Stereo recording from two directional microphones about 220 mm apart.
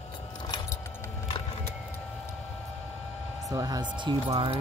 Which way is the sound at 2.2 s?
Centre (ahead or behind).